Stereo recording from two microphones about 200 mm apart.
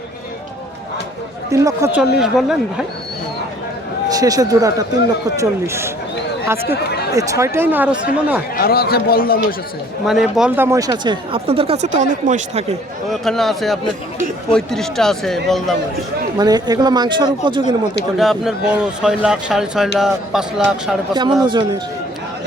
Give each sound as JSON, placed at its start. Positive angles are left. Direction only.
{"t": 1.5, "sound": "speech", "side_deg": -15}
{"t": 2.0, "sound": "a man's voice", "side_deg": 0}
{"t": 4.1, "sound": "speech", "side_deg": -15}
{"t": 8.5, "sound": "speech", "side_deg": 50}
{"t": 10.1, "sound": "speech", "side_deg": 0}
{"t": 13.1, "sound": "a man's voice", "side_deg": 0}
{"t": 16.4, "sound": "speech", "side_deg": -20}
{"t": 18.2, "sound": "a man's voice", "side_deg": 0}
{"t": 21.1, "sound": "speech", "side_deg": -20}